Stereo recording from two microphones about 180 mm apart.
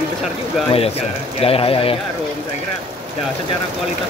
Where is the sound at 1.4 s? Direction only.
30° left (ahead or behind).